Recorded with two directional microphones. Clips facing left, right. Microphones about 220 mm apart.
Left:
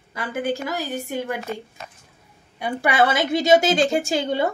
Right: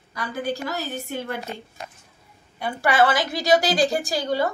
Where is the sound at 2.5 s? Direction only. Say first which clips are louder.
Even; 20° left (ahead or behind).